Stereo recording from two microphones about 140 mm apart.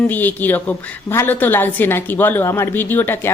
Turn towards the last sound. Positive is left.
turn(degrees=15)  # may be behind; listen again after turning